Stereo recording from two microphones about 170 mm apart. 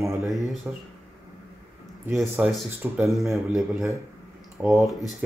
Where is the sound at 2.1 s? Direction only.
Centre (ahead or behind).